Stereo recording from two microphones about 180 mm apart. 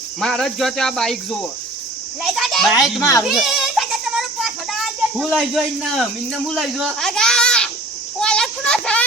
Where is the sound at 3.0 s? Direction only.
15° left (ahead or behind).